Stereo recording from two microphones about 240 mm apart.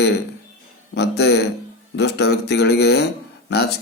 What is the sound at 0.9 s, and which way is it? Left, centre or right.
Speech, left.